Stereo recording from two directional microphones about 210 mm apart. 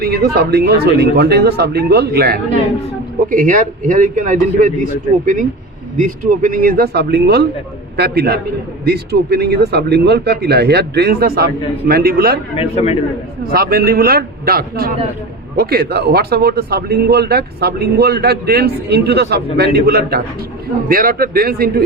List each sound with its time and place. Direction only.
0.0 s a man's voice: 50° right (ahead or behind)
12.5 s a man's voice: 30° left (ahead or behind)
13.4 s a man's voice: 45° right (ahead or behind)